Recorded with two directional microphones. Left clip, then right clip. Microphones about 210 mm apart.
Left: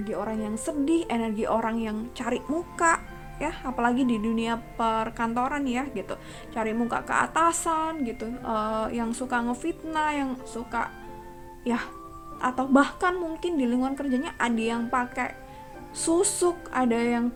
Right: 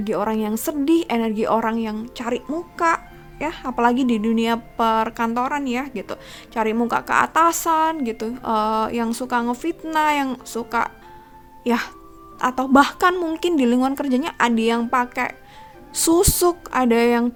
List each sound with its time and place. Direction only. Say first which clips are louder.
0.0 s a woman's voice: right 8 dB; 45° right (ahead or behind)